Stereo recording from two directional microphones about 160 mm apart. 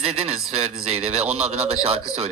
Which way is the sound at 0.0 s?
40° right (ahead or behind).